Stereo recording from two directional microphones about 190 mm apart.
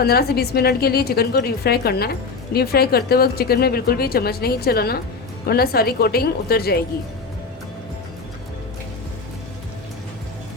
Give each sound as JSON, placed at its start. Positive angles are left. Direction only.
{"t": 0.0, "sound": "a woman's voice", "side_deg": 55}